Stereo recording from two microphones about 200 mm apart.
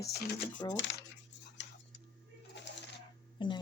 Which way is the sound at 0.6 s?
20° left (ahead or behind).